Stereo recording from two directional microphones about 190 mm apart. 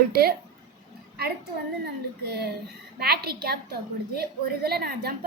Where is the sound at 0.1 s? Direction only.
55° right (ahead or behind).